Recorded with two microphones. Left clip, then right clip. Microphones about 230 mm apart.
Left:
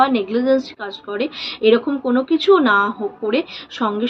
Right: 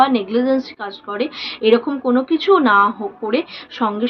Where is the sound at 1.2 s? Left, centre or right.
Centre.